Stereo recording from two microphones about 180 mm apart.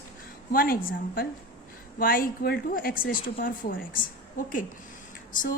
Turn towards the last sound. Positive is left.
turn(degrees=50)  # may be behind; listen again after turning